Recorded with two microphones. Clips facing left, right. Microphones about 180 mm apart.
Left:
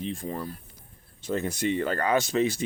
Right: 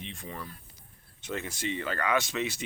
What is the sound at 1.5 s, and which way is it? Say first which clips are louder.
Speech: left 7 dB; 50° left (ahead or behind).